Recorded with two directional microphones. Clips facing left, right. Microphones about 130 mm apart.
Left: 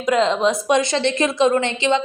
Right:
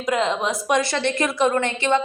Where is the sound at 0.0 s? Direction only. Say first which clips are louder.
Left 5 dB; 20° right (ahead or behind).